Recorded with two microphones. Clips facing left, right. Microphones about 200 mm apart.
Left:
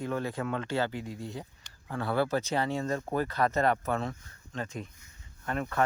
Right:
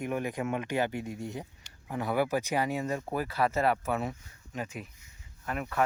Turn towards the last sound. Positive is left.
turn(degrees=-5)  # may be behind; listen again after turning